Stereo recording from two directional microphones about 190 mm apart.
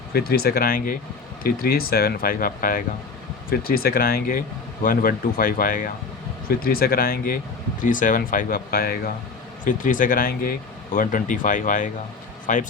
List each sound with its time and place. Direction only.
0.1 s speech: 55° left (ahead or behind)